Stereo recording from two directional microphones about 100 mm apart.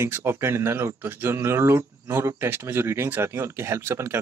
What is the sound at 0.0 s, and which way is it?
Speech, 25° right (ahead or behind).